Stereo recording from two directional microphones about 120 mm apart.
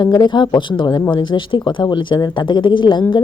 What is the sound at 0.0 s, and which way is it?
Speech, 35° left (ahead or behind).